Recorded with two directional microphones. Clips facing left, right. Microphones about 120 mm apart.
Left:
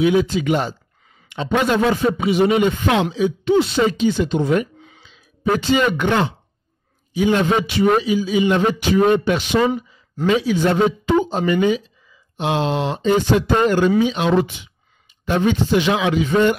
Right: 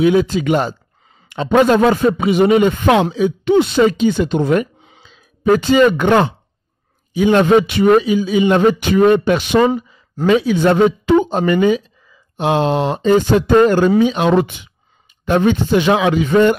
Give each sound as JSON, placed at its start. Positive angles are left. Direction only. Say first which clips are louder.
{"t": 0.0, "sound": "speech", "louder": "right 3 dB", "side_deg": -45}